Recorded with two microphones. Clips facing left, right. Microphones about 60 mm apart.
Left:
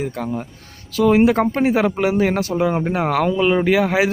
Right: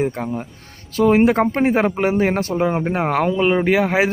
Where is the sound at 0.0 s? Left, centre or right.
Right.